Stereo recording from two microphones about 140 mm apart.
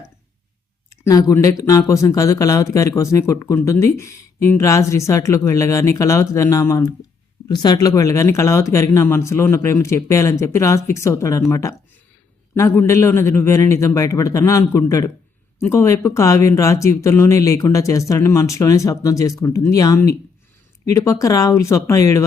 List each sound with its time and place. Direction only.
0.9 s speech: 20° left (ahead or behind)